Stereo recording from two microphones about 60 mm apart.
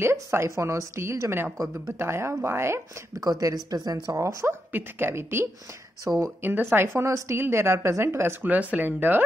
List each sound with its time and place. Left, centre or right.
0.0 s speech: right
3.2 s speech: right
4.7 s speech: right
7.1 s speech: right
8.5 s speech: right